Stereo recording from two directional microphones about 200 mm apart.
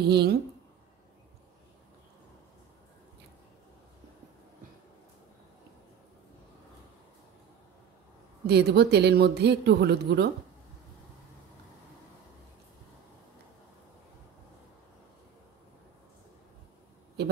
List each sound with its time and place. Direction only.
0.0 s speech: 55° right (ahead or behind)
8.5 s speech: 55° right (ahead or behind)